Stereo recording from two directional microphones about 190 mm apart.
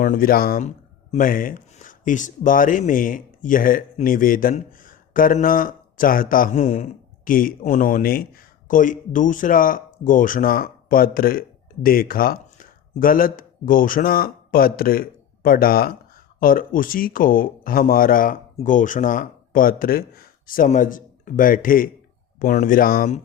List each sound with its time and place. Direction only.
0.0 s speech: 45° left (ahead or behind)